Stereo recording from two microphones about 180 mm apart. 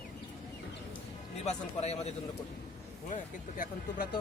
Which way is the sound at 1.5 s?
35° left (ahead or behind).